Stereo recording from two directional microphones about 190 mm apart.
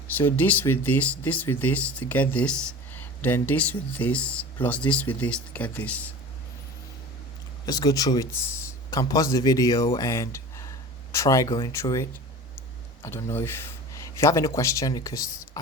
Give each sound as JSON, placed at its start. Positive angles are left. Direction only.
{"t": 0.1, "sound": "speech", "side_deg": 10}
{"t": 7.6, "sound": "speech", "side_deg": 20}